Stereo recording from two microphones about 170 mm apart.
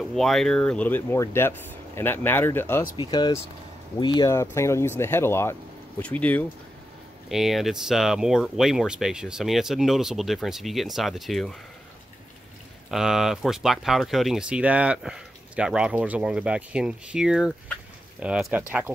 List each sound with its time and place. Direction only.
0.1 s speech: centre (ahead or behind)
3.0 s speech: 25° left (ahead or behind)
4.3 s speech: 15° left (ahead or behind)
7.2 s speech: centre (ahead or behind)
12.9 s speech: 5° right (ahead or behind)